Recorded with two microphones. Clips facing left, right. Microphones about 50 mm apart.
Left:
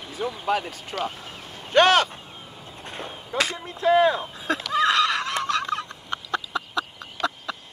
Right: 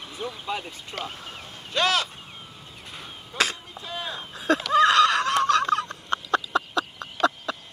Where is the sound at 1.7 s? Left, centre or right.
Left.